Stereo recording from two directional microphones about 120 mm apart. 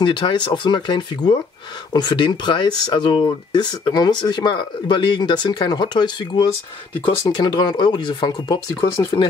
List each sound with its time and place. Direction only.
0.0 s speech: 40° left (ahead or behind)
8.9 s speech: 30° left (ahead or behind)